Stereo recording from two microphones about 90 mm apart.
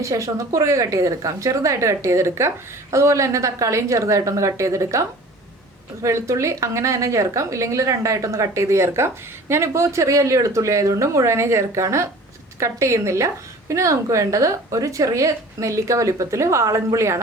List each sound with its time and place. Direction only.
0.0 s speech: 35° right (ahead or behind)